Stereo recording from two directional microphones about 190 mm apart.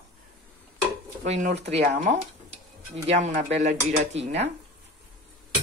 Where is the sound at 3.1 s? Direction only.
40° right (ahead or behind).